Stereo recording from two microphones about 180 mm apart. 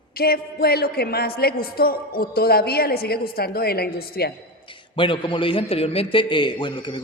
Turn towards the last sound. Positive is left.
turn(degrees=25)  # may be behind; listen again after turning